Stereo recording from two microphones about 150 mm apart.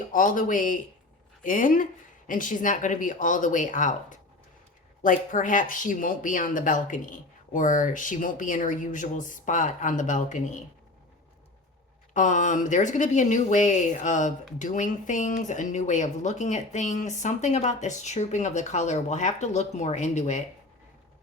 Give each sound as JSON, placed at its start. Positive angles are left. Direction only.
{"t": 0.1, "sound": "speech", "side_deg": 60}
{"t": 12.1, "sound": "speech", "side_deg": 55}